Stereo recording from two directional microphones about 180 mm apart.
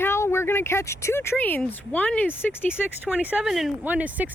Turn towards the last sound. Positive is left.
turn(degrees=-10)  # may be behind; listen again after turning